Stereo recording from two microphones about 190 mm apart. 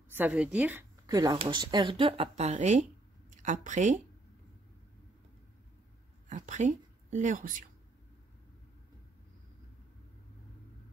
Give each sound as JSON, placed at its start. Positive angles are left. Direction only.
{"t": 0.1, "sound": "speech", "side_deg": -10}
{"t": 6.2, "sound": "a woman's voice", "side_deg": -40}